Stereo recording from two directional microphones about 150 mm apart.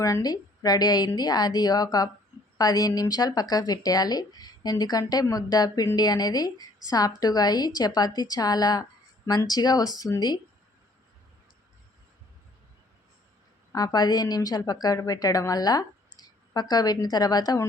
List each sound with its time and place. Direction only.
0.0 s speech: 25° left (ahead or behind)
13.7 s speech: 25° left (ahead or behind)